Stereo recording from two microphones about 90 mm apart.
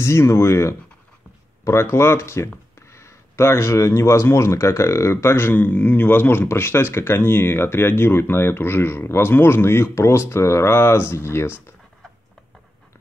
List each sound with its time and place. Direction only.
0.0 s speech: 30° left (ahead or behind)